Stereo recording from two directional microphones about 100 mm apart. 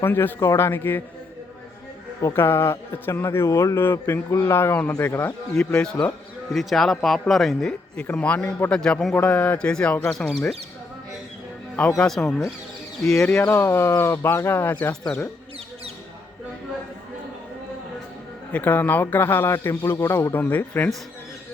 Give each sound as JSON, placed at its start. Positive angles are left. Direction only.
{"t": 0.0, "sound": "a man's voice", "side_deg": 20}
{"t": 2.3, "sound": "a man's voice", "side_deg": 25}
{"t": 11.9, "sound": "a man's voice", "side_deg": 5}
{"t": 18.5, "sound": "a man's voice", "side_deg": 20}